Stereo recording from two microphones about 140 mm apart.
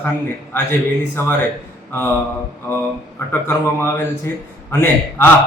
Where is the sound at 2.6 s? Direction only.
15° left (ahead or behind).